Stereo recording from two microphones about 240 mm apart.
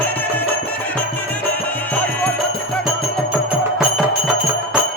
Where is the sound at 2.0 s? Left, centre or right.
Centre.